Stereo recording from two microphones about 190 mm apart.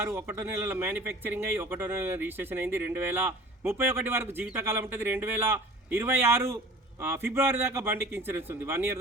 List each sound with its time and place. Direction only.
0.0 s speech: 10° right (ahead or behind)